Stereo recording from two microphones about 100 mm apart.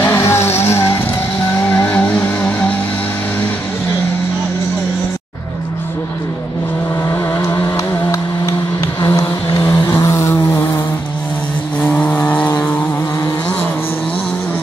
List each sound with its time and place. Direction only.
0.0 s vehicle: 25° left (ahead or behind)
7.1 s vehicle: 30° left (ahead or behind)
11.8 s vehicle: 15° left (ahead or behind)